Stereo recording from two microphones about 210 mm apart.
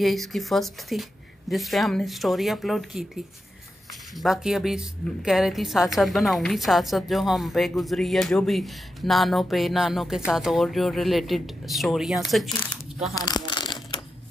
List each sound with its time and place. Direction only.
0.0 s a woman's voice: centre (ahead or behind)
4.2 s a woman's voice: centre (ahead or behind)
13.1 s a sound: 20° left (ahead or behind)